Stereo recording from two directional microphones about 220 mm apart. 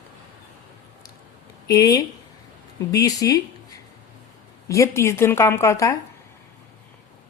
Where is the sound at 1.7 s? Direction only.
15° left (ahead or behind).